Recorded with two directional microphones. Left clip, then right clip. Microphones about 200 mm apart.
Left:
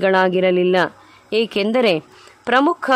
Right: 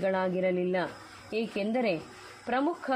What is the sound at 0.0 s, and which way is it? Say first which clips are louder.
A man's voice: left 13 dB; 50° left (ahead or behind).